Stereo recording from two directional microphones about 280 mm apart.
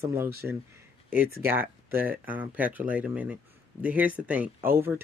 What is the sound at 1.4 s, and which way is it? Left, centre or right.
Speech, centre.